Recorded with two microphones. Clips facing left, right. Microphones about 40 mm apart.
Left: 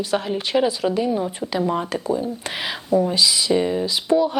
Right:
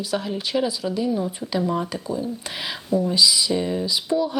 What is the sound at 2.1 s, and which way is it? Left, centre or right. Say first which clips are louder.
A woman's voice: left 4 dB; left.